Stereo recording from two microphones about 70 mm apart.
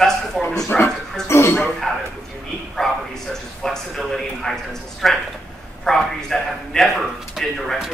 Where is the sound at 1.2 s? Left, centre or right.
Left.